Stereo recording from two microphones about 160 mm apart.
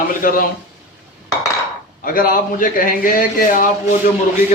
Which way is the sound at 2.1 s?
60° left (ahead or behind).